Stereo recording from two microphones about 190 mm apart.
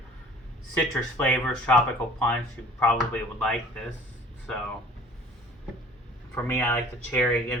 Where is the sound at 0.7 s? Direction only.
10° left (ahead or behind).